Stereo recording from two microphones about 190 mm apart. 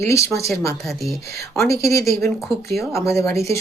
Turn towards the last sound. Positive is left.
turn(degrees=15)  # may be behind; listen again after turning